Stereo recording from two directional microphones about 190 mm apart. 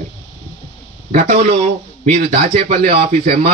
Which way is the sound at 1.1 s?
40° right (ahead or behind).